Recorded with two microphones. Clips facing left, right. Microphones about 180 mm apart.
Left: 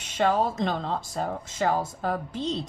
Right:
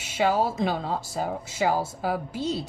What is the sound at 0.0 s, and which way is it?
Speech, 5° right (ahead or behind).